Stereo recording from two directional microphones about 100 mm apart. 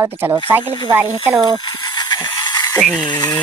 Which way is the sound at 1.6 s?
45° left (ahead or behind).